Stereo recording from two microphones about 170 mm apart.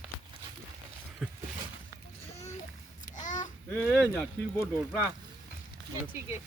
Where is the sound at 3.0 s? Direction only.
45° left (ahead or behind).